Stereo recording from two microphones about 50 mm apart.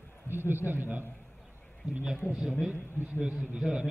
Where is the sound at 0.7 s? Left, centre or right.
Right.